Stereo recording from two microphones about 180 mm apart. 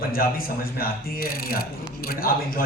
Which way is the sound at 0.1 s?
55° left (ahead or behind).